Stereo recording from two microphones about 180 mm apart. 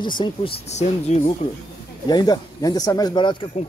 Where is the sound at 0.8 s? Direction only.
40° left (ahead or behind).